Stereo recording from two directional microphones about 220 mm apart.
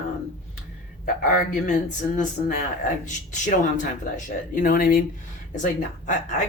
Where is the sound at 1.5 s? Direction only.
35° left (ahead or behind).